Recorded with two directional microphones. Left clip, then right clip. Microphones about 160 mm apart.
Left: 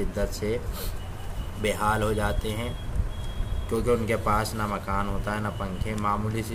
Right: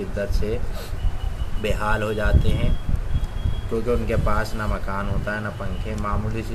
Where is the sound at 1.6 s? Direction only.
30° left (ahead or behind).